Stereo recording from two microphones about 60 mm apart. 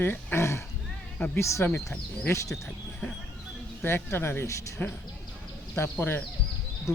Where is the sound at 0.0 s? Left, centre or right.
Left.